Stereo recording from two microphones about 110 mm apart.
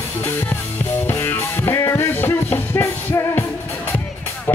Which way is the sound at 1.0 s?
20° left (ahead or behind).